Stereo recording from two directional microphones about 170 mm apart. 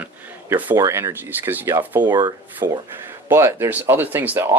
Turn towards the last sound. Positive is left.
turn(degrees=-15)  # may be behind; listen again after turning